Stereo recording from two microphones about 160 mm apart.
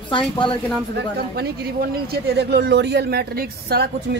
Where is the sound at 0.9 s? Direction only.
80° right.